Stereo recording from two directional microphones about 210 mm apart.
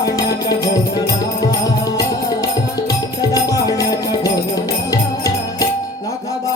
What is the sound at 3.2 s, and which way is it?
Music, 15° left (ahead or behind).